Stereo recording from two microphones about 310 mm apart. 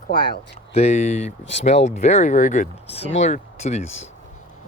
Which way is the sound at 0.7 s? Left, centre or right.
Left.